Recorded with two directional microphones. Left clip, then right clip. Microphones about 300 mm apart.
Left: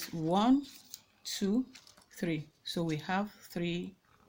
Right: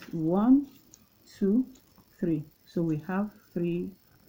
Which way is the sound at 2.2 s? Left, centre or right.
Left.